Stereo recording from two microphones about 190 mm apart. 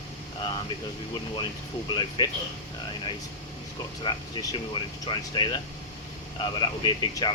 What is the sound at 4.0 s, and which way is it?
Speech, 25° left (ahead or behind).